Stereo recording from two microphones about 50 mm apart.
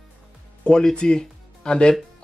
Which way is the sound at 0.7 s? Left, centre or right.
Centre.